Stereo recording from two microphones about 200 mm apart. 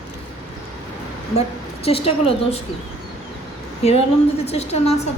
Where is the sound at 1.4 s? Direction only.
30° left (ahead or behind).